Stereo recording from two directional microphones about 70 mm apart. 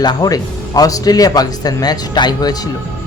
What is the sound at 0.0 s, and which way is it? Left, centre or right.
Speech, left.